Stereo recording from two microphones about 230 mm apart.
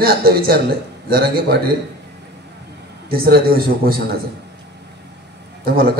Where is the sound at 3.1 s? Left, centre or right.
Right.